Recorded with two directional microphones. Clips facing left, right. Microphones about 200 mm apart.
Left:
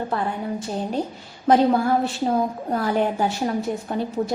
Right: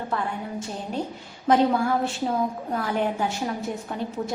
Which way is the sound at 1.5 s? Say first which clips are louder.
Left 3 dB; 35° left (ahead or behind).